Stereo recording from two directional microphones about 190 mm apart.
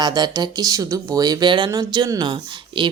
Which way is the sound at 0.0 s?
20° right (ahead or behind).